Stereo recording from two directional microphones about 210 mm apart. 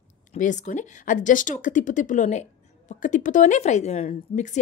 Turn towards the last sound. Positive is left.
turn(degrees=35)  # may be behind; listen again after turning